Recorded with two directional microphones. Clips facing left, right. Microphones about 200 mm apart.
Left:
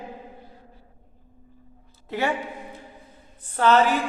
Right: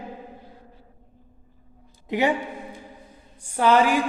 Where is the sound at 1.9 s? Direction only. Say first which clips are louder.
Right 4 dB; 15° right (ahead or behind).